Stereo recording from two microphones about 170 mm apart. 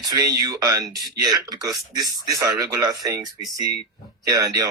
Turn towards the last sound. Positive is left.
turn(degrees=-20)  # may be behind; listen again after turning